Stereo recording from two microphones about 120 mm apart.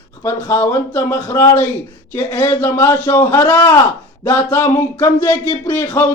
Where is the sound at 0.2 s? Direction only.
25° left (ahead or behind).